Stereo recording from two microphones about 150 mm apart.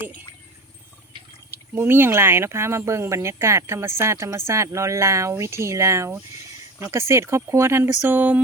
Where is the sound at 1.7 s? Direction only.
15° right (ahead or behind).